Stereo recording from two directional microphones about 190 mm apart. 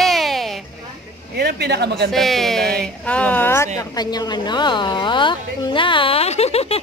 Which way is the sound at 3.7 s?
20° left (ahead or behind).